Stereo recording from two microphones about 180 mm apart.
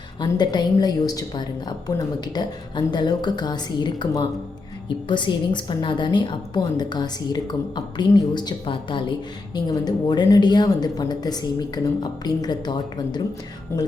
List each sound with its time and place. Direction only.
0.2 s a woman's voice: 25° left (ahead or behind)